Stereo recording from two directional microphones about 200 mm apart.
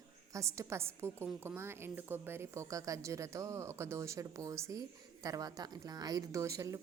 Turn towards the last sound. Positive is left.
turn(degrees=-15)  # may be behind; listen again after turning